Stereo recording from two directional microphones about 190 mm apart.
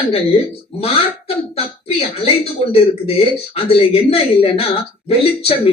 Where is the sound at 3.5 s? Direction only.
30° left (ahead or behind).